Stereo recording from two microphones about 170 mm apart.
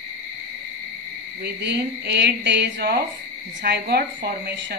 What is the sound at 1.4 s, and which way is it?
Speech, 80° right.